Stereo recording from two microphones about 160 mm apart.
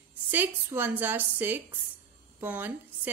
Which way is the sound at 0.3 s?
10° right (ahead or behind).